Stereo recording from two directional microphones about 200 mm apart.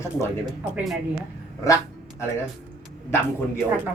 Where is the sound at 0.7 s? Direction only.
Centre (ahead or behind).